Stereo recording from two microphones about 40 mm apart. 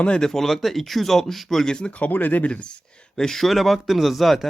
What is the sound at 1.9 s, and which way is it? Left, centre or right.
Speech, left.